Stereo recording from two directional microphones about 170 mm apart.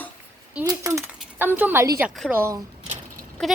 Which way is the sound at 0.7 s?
20° right (ahead or behind).